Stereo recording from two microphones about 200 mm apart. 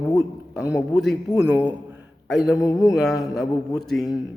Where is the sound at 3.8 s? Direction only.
Centre (ahead or behind).